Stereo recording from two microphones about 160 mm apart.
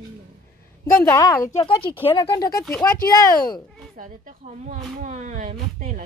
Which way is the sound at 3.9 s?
55° right (ahead or behind).